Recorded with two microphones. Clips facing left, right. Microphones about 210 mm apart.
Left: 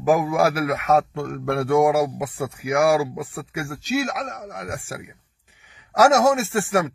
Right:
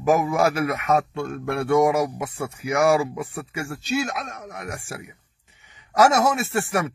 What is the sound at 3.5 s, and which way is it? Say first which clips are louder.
Speech: left 2 dB; 80° left.